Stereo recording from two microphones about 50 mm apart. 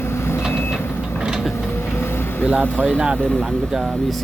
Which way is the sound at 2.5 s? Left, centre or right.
Right.